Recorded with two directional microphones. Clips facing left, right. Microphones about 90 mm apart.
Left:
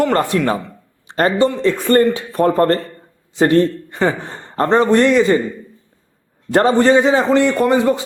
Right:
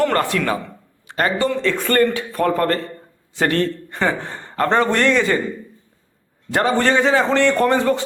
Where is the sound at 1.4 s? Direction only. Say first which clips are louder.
Left 6 dB; 20° left (ahead or behind).